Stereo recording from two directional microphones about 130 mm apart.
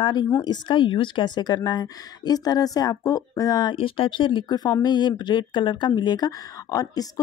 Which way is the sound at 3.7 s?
45° left (ahead or behind).